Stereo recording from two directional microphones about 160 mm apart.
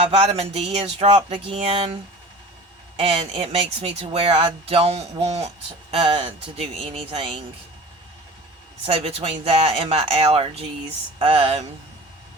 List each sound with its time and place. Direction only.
0.1 s speech: 40° right (ahead or behind)
3.0 s speech: 40° right (ahead or behind)
8.9 s speech: 40° right (ahead or behind)